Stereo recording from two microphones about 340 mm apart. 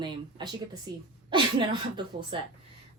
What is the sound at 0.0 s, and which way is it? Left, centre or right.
A woman's voice, centre.